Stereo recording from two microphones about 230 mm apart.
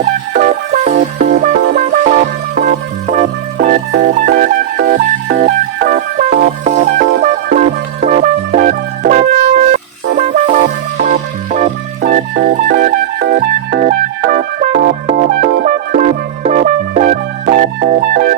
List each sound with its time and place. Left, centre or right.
0.3 s music: right
6.7 s music: right